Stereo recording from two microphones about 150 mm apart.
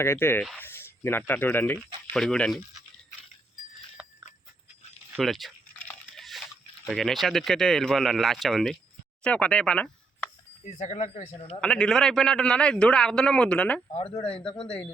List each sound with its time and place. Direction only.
0.0 s speech: 15° left (ahead or behind)
2.1 s a man's voice: 5° left (ahead or behind)
4.0 s a sound: 5° right (ahead or behind)
5.1 s a man's voice: centre (ahead or behind)
5.8 s a sound: 10° left (ahead or behind)
6.8 s a man's voice: centre (ahead or behind)
10.8 s speech: 50° left (ahead or behind)
11.6 s a man's voice: 5° left (ahead or behind)
13.9 s speech: 40° left (ahead or behind)